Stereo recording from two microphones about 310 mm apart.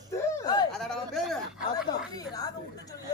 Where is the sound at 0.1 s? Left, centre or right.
Centre.